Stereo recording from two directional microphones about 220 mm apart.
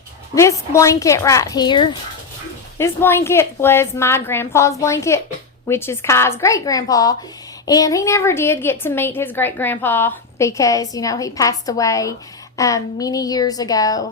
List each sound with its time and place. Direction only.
0.3 s a woman's voice: 15° left (ahead or behind)